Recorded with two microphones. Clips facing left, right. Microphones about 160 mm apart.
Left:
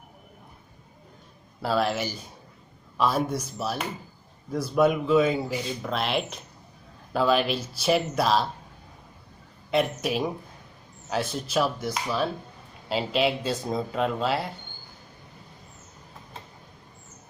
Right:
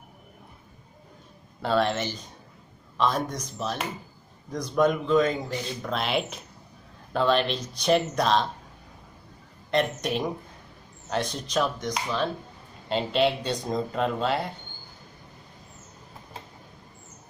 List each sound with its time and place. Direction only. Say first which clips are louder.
1.6 s speech: right 1 dB; 5° left (ahead or behind)
9.7 s speech: left 1 dB; 5° left (ahead or behind)